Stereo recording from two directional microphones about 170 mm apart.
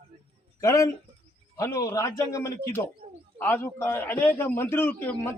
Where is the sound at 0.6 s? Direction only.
20° left (ahead or behind).